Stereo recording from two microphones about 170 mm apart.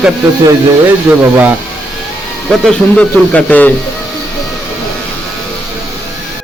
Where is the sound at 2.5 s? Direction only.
5° left (ahead or behind).